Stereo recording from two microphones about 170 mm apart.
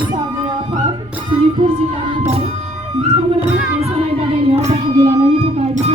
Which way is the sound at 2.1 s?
35° right (ahead or behind).